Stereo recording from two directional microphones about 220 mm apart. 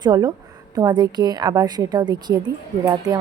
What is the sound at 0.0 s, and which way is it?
A woman's voice, 20° right (ahead or behind).